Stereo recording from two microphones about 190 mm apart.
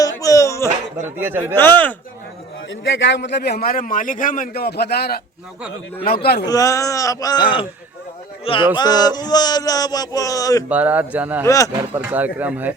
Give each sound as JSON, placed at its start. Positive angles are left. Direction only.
{"t": 0.0, "sound": "a sound", "side_deg": 20}
{"t": 1.2, "sound": "speech", "side_deg": -10}
{"t": 1.5, "sound": "speech", "side_deg": 10}
{"t": 2.8, "sound": "a man's voice", "side_deg": 70}
{"t": 6.2, "sound": "a man's voice", "side_deg": 60}
{"t": 6.5, "sound": "a sound", "side_deg": 15}
{"t": 10.7, "sound": "speech", "side_deg": -10}
{"t": 11.4, "sound": "speech", "side_deg": 15}
{"t": 11.8, "sound": "speech", "side_deg": -10}